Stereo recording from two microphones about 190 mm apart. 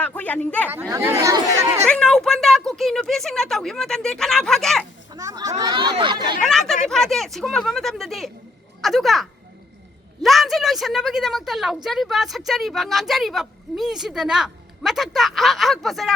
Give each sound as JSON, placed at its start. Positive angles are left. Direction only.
{"t": 0.2, "sound": "speech", "side_deg": 10}
{"t": 0.7, "sound": "speech", "side_deg": -15}
{"t": 1.9, "sound": "a woman's voice", "side_deg": 5}
{"t": 5.1, "sound": "speech", "side_deg": -20}
{"t": 6.4, "sound": "a woman's voice", "side_deg": 0}
{"t": 10.2, "sound": "a woman's voice", "side_deg": 0}